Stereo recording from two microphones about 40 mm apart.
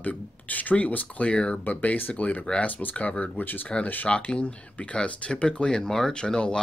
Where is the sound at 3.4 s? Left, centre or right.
Left.